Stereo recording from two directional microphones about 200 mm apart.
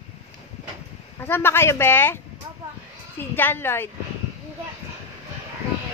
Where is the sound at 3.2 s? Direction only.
10° left (ahead or behind).